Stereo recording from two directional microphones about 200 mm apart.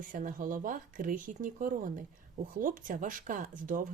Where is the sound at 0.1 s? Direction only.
45° right (ahead or behind).